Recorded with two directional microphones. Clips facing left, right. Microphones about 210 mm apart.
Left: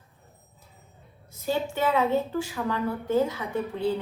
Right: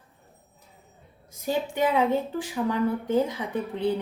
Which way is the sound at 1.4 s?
15° right (ahead or behind).